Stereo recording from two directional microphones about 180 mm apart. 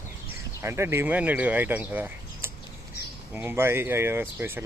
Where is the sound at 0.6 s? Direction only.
15° right (ahead or behind).